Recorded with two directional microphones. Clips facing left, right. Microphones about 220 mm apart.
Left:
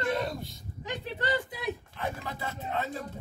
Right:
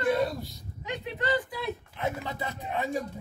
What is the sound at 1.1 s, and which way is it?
Speech, 25° left (ahead or behind).